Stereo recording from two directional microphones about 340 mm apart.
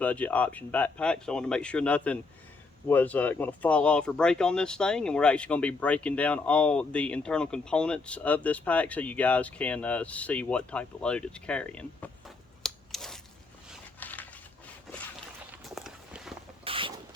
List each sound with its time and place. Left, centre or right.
0.0 s speech: centre
12.6 s a sound: centre
15.7 s walk: centre
16.6 s rodents: centre